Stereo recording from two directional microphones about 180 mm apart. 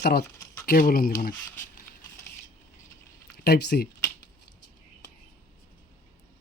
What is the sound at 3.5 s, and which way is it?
Speech, 65° left (ahead or behind).